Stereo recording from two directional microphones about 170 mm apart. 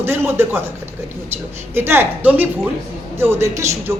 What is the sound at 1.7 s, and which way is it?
A man's voice, 15° right (ahead or behind).